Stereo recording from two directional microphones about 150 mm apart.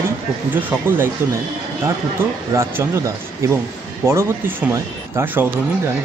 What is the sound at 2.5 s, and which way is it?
Speech, 20° right (ahead or behind).